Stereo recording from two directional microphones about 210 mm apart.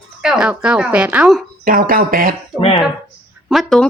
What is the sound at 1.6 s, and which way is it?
Speech, 40° right (ahead or behind).